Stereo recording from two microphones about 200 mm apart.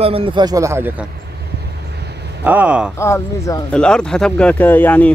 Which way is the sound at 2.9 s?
15° left (ahead or behind).